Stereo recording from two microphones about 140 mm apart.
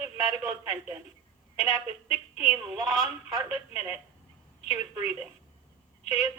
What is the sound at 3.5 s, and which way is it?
A woman's voice, 15° right (ahead or behind).